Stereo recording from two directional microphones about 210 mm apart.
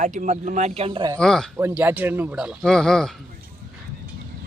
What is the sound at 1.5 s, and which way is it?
Speech, 10° right (ahead or behind).